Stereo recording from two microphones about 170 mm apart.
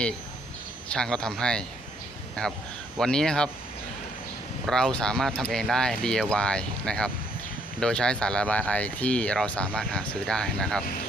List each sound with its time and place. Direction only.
0.9 s speech: 5° left (ahead or behind)
4.6 s speech: 5° left (ahead or behind)